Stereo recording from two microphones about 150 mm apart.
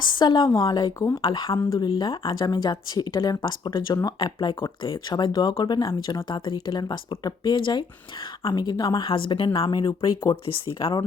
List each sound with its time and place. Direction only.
0.2 s speech: 30° left (ahead or behind)